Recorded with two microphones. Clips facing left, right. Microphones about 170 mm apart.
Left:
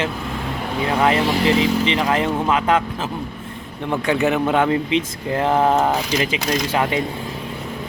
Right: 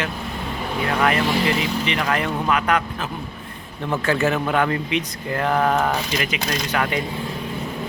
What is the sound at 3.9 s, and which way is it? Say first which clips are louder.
Speech: left 2 dB; 15° left (ahead or behind).